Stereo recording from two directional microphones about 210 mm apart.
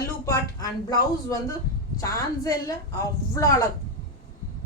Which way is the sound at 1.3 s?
15° left (ahead or behind).